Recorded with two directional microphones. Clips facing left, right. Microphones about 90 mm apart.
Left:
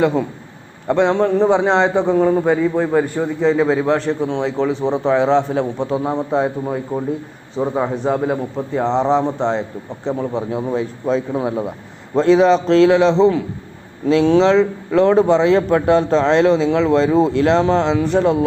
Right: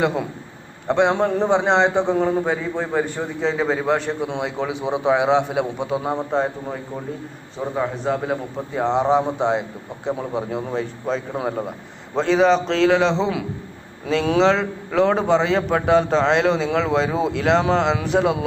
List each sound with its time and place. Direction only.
0.0 s a man's voice: centre (ahead or behind)
7.6 s a man's voice: 20° left (ahead or behind)
8.0 s a man's voice: 5° left (ahead or behind)